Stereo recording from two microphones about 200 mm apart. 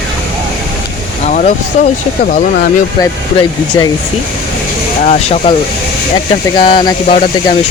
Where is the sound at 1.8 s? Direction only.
35° left (ahead or behind).